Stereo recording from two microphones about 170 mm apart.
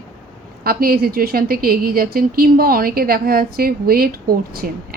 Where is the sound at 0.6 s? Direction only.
60° right (ahead or behind).